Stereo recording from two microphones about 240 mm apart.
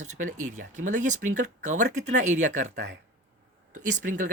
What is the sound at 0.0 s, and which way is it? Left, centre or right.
Speech, right.